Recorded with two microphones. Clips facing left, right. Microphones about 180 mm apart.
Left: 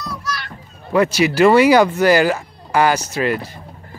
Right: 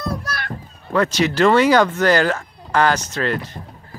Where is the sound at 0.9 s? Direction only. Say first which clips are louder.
Left 3 dB; 10° left (ahead or behind).